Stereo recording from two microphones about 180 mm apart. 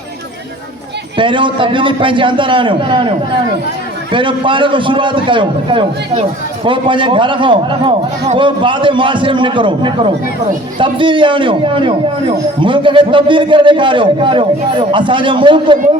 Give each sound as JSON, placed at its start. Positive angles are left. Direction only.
{"t": 1.1, "sound": "a man's voice", "side_deg": -25}